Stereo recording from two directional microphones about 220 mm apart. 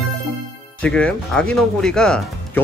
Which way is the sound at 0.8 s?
5° left (ahead or behind).